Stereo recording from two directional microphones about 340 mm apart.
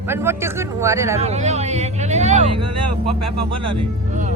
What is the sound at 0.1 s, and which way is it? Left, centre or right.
Speech, centre.